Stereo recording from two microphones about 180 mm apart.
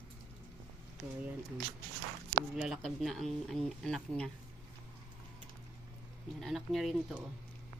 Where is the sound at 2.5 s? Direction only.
Centre (ahead or behind).